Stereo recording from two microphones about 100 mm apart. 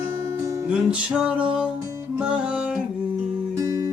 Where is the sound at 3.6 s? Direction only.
35° right (ahead or behind).